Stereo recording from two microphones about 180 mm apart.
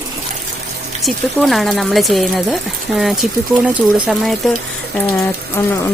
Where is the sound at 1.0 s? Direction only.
Centre (ahead or behind).